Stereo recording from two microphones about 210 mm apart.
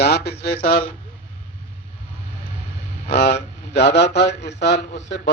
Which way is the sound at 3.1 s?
55° left (ahead or behind).